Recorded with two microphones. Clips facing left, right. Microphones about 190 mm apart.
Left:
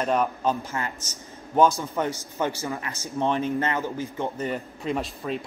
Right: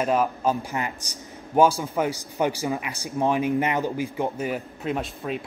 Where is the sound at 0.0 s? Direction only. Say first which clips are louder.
Right 1 dB; 5° right (ahead or behind).